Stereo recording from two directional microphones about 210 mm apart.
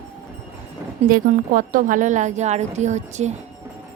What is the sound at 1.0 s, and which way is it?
A woman's voice, 40° right (ahead or behind).